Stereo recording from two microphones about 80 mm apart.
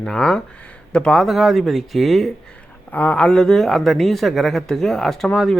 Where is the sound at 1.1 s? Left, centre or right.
Centre.